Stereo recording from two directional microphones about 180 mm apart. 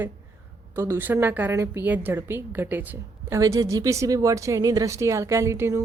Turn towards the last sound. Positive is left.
turn(degrees=-15)  # may be behind; listen again after turning